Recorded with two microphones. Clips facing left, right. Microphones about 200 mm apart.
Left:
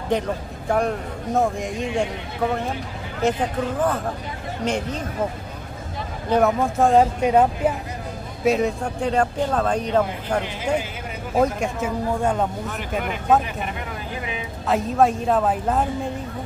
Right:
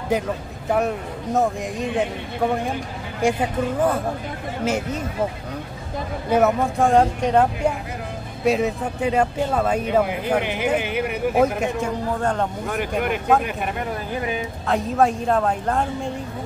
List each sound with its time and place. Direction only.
0.1 s speech: 5° right (ahead or behind)
3.2 s speech: 10° right (ahead or behind)
6.3 s speech: centre (ahead or behind)
10.4 s speech: 70° right (ahead or behind)
11.3 s speech: 5° right (ahead or behind)
12.2 s speech: 10° left (ahead or behind)
12.7 s speech: 60° right (ahead or behind)
14.7 s speech: centre (ahead or behind)